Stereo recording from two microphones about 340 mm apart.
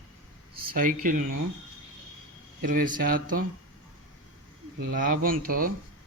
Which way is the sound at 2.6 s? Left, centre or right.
Right.